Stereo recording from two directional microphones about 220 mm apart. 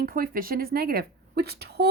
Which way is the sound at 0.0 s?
40° right (ahead or behind).